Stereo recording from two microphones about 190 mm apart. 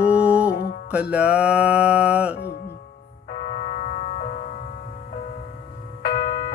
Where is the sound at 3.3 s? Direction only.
45° left (ahead or behind).